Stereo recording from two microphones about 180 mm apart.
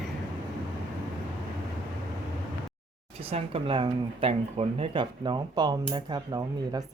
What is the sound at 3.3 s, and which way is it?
Speech, 30° right (ahead or behind).